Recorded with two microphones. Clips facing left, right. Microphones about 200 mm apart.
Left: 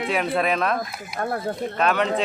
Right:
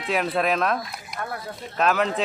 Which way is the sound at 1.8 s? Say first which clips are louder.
Even; centre (ahead or behind).